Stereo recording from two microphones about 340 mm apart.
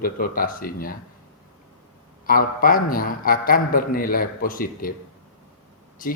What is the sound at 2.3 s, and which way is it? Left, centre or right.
A man's voice, left.